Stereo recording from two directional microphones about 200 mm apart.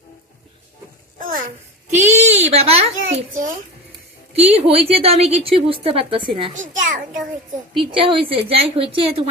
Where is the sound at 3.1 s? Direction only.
40° right (ahead or behind).